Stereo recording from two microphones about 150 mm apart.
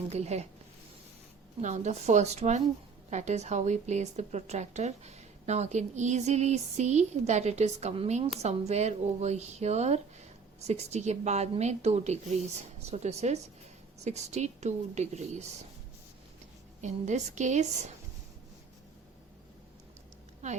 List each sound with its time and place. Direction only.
0.1 s a woman's voice: 45° right (ahead or behind)
1.6 s a woman's voice: 50° right (ahead or behind)
16.8 s a woman's voice: 50° right (ahead or behind)